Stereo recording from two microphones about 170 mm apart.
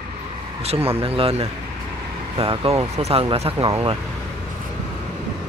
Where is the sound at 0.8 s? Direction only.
35° right (ahead or behind).